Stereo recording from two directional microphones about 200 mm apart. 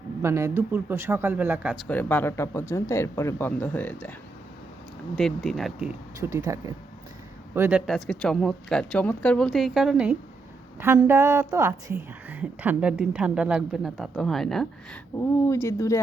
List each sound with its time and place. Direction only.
0.2 s a woman's voice: 15° right (ahead or behind)
1.9 s speech: 10° left (ahead or behind)
5.1 s speech: centre (ahead or behind)
6.1 s a woman's voice: 15° right (ahead or behind); by 14.7 s centre (ahead or behind)
15.1 s speech: 15° left (ahead or behind)